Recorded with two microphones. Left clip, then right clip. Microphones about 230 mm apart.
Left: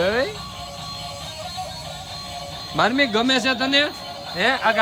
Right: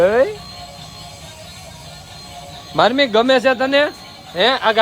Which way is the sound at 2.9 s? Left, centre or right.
Right.